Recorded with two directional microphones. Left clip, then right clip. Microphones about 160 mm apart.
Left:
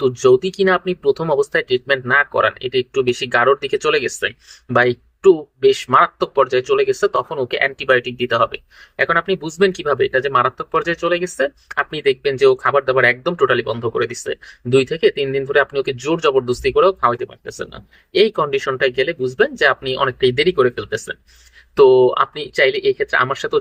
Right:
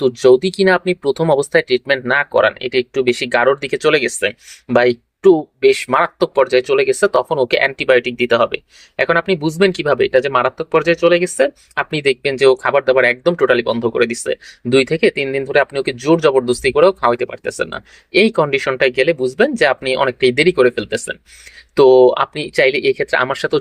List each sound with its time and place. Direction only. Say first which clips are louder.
0.0 s speech: right 2 dB; 40° right (ahead or behind)